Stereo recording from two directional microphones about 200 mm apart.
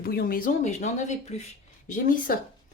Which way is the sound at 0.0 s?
50° left (ahead or behind).